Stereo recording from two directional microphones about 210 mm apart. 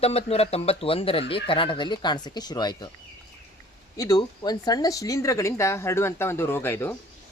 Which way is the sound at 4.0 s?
20° left (ahead or behind).